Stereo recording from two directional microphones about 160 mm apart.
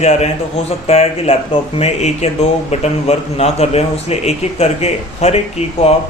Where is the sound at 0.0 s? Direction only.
40° left (ahead or behind).